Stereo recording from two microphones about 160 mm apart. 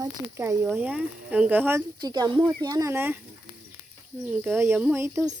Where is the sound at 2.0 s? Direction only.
25° right (ahead or behind).